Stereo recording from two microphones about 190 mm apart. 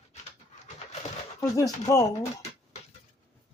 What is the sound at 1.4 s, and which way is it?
Speech, 15° left (ahead or behind).